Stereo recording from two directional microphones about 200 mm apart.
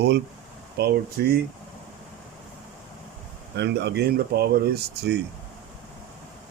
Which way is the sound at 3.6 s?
55° right (ahead or behind).